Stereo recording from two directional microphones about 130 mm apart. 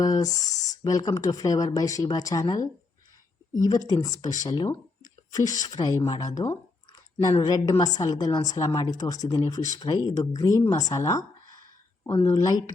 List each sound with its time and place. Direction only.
0.0 s speech: 30° left (ahead or behind)